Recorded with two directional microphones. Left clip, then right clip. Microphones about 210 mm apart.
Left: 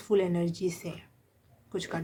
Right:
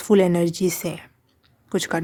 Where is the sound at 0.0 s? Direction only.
55° right (ahead or behind).